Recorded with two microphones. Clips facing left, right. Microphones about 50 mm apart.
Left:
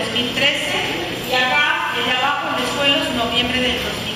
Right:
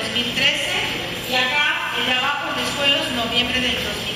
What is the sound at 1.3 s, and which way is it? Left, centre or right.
A woman's voice, centre.